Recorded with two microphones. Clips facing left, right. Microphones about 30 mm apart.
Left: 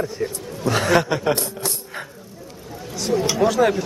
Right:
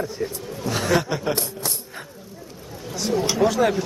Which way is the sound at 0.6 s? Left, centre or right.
Left.